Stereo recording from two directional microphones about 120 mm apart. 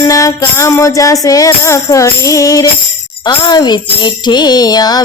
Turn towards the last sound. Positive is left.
turn(degrees=35)  # may be behind; listen again after turning